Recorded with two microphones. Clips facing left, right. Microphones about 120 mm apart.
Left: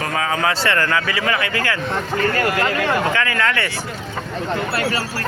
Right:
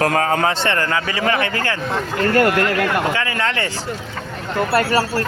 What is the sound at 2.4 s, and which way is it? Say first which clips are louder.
Speech: right 3 dB; 60° right (ahead or behind).